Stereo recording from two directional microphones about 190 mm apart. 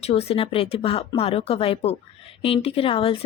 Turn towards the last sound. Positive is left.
turn(degrees=30)  # may be behind; listen again after turning